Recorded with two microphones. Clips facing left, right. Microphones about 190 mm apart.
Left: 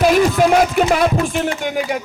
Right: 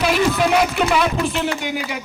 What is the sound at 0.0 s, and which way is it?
Music, 45° left (ahead or behind).